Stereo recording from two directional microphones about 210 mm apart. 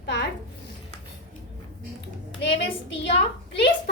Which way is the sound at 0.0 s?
55° left (ahead or behind).